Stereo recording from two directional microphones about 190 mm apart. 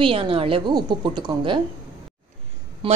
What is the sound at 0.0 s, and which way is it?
A woman's voice, 30° right (ahead or behind).